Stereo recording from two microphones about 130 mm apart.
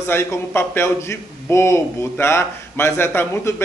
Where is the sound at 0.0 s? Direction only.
20° left (ahead or behind).